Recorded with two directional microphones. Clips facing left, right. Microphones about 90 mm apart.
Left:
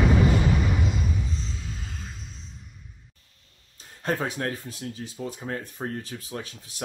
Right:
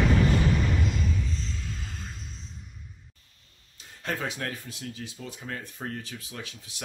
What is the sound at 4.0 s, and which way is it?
Speech, 35° left (ahead or behind).